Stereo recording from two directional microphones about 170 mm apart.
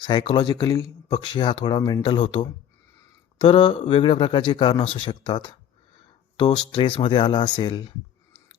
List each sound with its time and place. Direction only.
0.0 s speech: 30° left (ahead or behind)
6.7 s speech: 30° left (ahead or behind)